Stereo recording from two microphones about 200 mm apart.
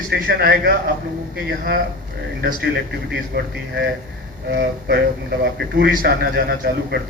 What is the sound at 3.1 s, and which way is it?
A man's voice, 55° right (ahead or behind).